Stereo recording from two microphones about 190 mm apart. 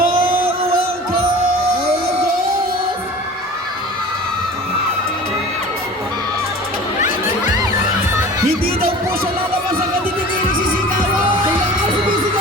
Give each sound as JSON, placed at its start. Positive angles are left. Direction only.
{"t": 0.0, "sound": "music", "side_deg": -50}
{"t": 7.4, "sound": "music", "side_deg": -20}
{"t": 8.4, "sound": "a sound", "side_deg": -50}